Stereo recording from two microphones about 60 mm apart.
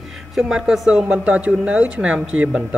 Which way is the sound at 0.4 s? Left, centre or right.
Centre.